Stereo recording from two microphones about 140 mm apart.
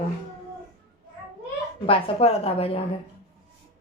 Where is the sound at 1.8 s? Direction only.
45° left (ahead or behind).